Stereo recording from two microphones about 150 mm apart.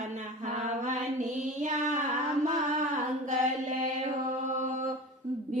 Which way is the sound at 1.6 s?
55° right (ahead or behind).